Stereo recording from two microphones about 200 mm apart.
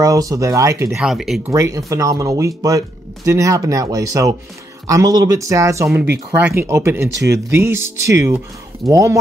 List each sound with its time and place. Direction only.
0.0 s speech: 15° right (ahead or behind)
0.8 s speech: centre (ahead or behind)
1.5 s speech: 15° right (ahead or behind)